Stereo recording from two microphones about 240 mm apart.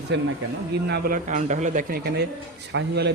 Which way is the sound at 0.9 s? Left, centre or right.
Right.